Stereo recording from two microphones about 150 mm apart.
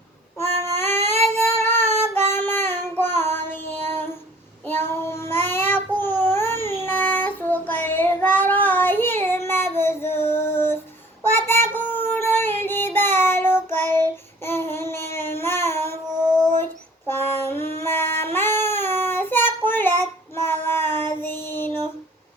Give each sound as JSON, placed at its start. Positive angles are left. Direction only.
{"t": 0.3, "sound": "child singing", "side_deg": 15}
{"t": 3.0, "sound": "music", "side_deg": 15}
{"t": 3.8, "sound": "child singing", "side_deg": 15}
{"t": 17.1, "sound": "a sound", "side_deg": 15}